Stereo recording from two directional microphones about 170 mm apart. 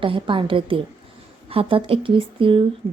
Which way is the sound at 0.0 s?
30° right (ahead or behind).